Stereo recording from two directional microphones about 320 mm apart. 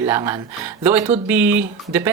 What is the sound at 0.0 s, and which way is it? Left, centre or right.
Speech, centre.